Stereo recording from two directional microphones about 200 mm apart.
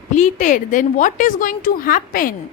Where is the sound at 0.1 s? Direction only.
35° left (ahead or behind).